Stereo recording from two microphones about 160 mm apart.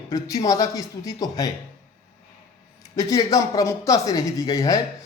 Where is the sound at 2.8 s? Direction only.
20° left (ahead or behind).